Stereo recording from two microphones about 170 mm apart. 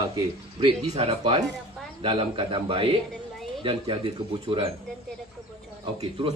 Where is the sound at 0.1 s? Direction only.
30° right (ahead or behind).